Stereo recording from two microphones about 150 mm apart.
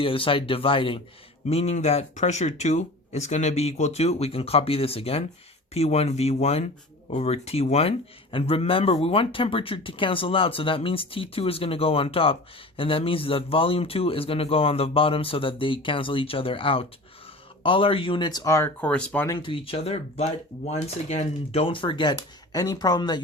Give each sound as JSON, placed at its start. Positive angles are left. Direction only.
{"t": 0.0, "sound": "speech", "side_deg": 35}
{"t": 18.8, "sound": "speech", "side_deg": 5}
{"t": 19.3, "sound": "speech", "side_deg": 35}